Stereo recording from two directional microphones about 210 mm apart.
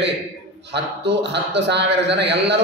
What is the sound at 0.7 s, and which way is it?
A man's voice, 55° right (ahead or behind).